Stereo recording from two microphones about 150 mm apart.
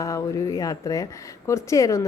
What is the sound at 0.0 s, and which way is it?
Speech, 20° left (ahead or behind).